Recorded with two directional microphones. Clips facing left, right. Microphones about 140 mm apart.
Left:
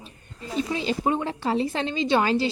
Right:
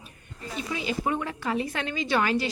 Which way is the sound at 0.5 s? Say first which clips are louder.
Left 5 dB; 30° left (ahead or behind).